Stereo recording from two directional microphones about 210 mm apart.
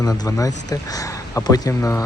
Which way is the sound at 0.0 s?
15° left (ahead or behind).